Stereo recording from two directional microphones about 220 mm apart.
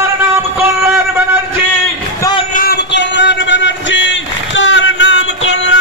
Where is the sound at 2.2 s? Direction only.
20° left (ahead or behind).